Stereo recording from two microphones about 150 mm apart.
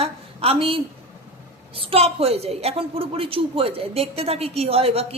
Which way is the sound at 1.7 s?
40° right (ahead or behind).